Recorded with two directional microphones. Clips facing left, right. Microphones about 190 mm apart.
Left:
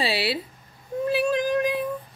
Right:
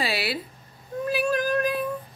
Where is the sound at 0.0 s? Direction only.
30° left (ahead or behind).